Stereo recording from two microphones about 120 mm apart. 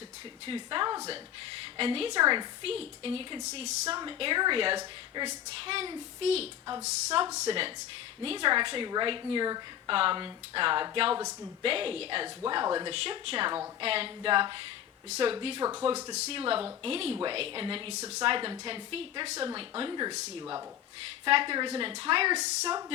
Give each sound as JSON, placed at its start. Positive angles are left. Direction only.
{"t": 0.4, "sound": "a woman's voice", "side_deg": -45}
{"t": 2.2, "sound": "a woman's voice", "side_deg": -35}
{"t": 2.6, "sound": "a woman's voice", "side_deg": -50}
{"t": 3.4, "sound": "speech", "side_deg": -65}
{"t": 3.8, "sound": "a woman's voice", "side_deg": -40}
{"t": 12.9, "sound": "a woman's voice", "side_deg": -55}
{"t": 19.9, "sound": "a woman's voice", "side_deg": -35}
{"t": 21.2, "sound": "a woman's voice", "side_deg": -45}